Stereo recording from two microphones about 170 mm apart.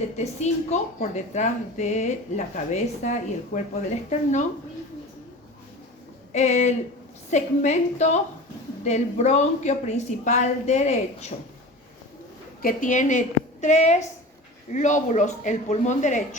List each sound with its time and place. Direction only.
0.2 s speech: 40° left (ahead or behind)
6.3 s a woman's voice: 45° left (ahead or behind)
12.6 s speech: 50° left (ahead or behind)